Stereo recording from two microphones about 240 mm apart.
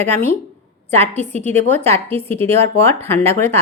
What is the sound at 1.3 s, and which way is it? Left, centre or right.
Speech, right.